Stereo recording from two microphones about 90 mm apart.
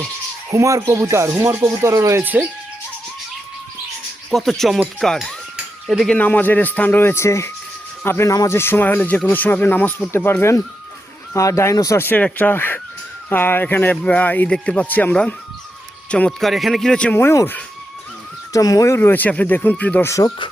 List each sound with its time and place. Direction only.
0.5 s speech: 35° right (ahead or behind)
2.2 s speech: 20° right (ahead or behind)
4.3 s a man's voice: centre (ahead or behind)
6.1 s speech: 20° left (ahead or behind); by 11.9 s 35° left (ahead or behind)
11.9 s speech: 20° left (ahead or behind)
16.4 s a man's voice: centre (ahead or behind)
18.5 s speech: 40° left (ahead or behind)
18.9 s speech: 20° left (ahead or behind)